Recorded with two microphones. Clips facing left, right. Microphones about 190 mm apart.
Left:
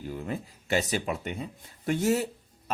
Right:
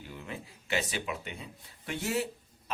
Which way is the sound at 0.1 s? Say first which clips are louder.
Left 8 dB; 40° left (ahead or behind).